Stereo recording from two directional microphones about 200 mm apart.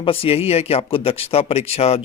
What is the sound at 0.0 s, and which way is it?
Speech, 30° left (ahead or behind).